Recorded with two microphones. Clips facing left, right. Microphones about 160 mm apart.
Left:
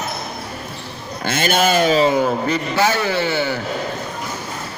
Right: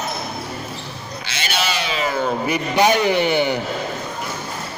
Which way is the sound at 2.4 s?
15° right (ahead or behind).